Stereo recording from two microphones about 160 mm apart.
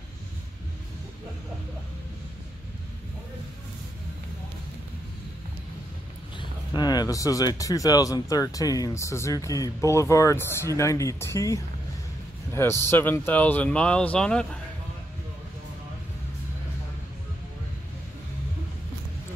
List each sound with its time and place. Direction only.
6.3 s speech: 25° left (ahead or behind); by 14.6 s 5° left (ahead or behind)